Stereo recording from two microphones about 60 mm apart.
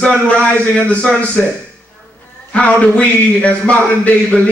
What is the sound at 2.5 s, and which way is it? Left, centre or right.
Speech, left.